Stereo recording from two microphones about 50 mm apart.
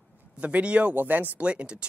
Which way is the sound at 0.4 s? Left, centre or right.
Right.